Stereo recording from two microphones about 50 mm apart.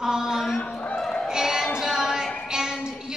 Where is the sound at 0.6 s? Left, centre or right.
Left.